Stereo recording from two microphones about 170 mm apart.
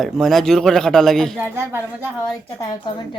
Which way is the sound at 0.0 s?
Centre (ahead or behind).